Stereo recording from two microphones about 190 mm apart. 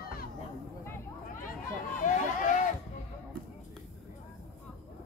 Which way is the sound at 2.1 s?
40° left (ahead or behind).